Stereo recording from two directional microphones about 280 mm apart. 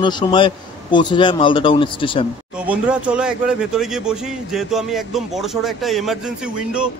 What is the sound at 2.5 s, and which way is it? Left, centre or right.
Speech, centre.